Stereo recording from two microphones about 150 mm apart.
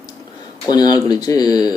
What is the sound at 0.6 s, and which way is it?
A man's voice, 25° left (ahead or behind).